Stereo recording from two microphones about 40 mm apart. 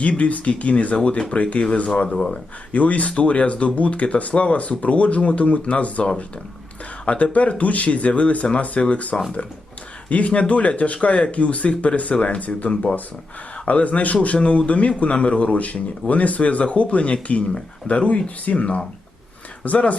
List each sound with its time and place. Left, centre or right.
0.0 s speech: left
2.7 s speech: left